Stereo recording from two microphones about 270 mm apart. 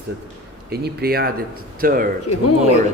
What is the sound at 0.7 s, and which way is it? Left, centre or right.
A man's voice, right.